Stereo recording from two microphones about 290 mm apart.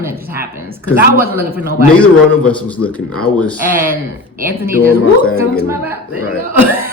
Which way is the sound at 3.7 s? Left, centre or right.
Right.